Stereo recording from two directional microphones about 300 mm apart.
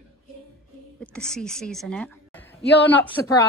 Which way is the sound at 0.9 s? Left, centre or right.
Centre.